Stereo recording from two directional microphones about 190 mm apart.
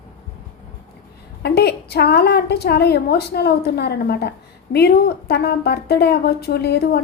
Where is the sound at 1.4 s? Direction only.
60° left (ahead or behind).